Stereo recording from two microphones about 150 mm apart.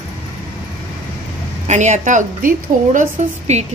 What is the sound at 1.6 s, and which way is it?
A woman's voice, 50° right (ahead or behind).